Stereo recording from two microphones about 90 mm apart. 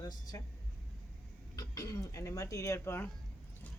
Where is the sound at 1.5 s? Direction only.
40° left (ahead or behind).